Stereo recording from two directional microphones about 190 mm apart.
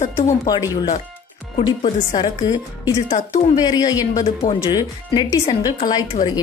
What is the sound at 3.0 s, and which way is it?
Speech, 35° left (ahead or behind).